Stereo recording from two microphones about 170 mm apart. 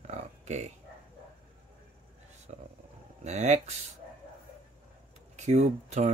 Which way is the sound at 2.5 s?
45° right (ahead or behind).